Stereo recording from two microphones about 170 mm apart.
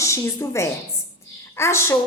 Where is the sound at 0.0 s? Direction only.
15° left (ahead or behind).